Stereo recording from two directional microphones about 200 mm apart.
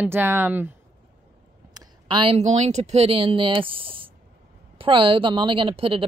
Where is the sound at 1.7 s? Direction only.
20° right (ahead or behind).